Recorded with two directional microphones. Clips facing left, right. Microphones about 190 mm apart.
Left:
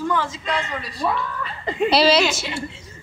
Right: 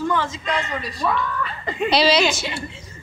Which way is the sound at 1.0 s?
30° left (ahead or behind).